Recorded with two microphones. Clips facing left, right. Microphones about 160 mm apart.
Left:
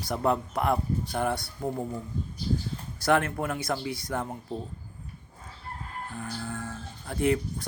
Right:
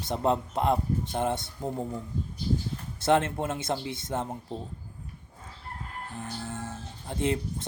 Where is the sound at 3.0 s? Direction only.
25° right (ahead or behind).